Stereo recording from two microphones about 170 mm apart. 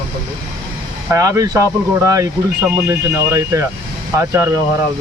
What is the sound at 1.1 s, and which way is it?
Speech, 20° right (ahead or behind).